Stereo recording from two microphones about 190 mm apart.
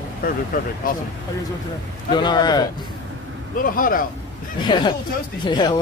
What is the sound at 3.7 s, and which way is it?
Speech, 45° left (ahead or behind).